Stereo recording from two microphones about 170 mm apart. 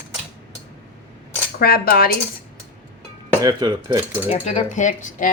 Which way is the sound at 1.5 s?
65° left (ahead or behind).